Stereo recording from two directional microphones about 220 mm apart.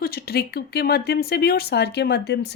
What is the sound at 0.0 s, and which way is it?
Speech, 45° left (ahead or behind).